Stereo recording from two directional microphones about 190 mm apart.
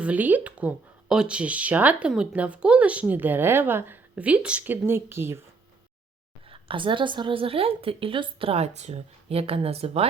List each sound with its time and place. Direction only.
0.0 s speech: 10° right (ahead or behind)
6.5 s a woman's voice: 25° right (ahead or behind)